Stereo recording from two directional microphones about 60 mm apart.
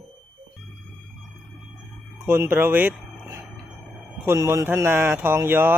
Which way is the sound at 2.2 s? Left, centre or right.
Right.